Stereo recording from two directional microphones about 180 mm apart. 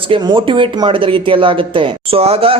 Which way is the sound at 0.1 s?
25° right (ahead or behind).